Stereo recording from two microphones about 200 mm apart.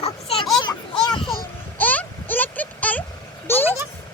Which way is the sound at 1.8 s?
10° left (ahead or behind).